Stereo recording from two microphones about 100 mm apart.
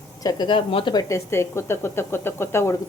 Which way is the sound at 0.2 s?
45° left (ahead or behind).